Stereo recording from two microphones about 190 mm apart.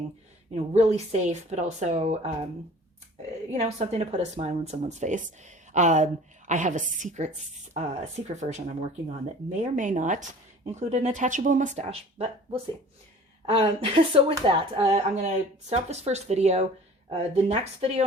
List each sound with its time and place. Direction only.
0.5 s speech: 35° right (ahead or behind)
3.5 s speech: 35° right (ahead or behind)